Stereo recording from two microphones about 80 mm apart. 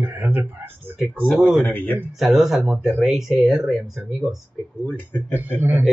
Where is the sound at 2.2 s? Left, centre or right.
Centre.